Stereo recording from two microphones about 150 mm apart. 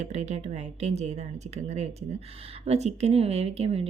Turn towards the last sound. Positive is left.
turn(degrees=-45)  # may be behind; listen again after turning